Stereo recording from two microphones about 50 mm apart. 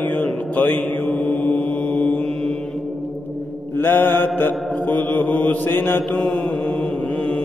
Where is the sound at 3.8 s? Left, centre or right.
Left.